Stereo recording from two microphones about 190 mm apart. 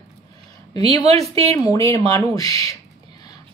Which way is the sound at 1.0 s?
35° right (ahead or behind).